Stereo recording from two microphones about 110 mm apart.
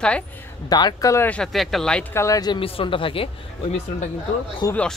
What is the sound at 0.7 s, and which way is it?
Speech, 40° left (ahead or behind).